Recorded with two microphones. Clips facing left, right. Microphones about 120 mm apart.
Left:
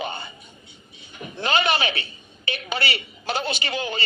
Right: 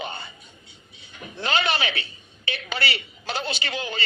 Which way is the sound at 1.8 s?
50° left (ahead or behind).